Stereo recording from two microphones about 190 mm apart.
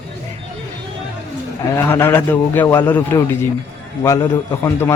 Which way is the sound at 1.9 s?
10° left (ahead or behind).